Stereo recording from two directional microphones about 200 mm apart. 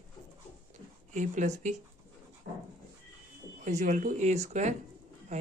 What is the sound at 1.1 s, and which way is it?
Speech, 40° right (ahead or behind).